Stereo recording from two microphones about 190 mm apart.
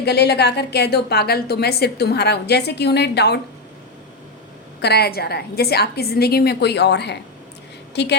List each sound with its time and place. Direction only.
0.0 s a woman's voice: 60° left (ahead or behind)
4.8 s a woman's voice: 60° left (ahead or behind)